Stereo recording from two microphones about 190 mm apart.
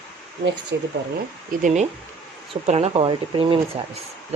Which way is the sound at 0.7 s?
70° right (ahead or behind).